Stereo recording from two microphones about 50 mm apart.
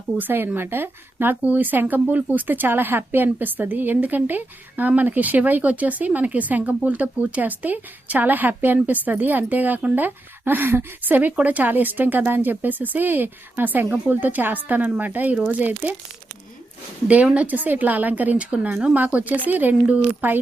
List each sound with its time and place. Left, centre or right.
0.2 s speech: right
1.4 s speech: right
17.3 s speech: right